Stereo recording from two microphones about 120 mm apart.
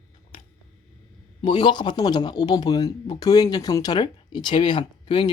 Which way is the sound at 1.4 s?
40° left (ahead or behind).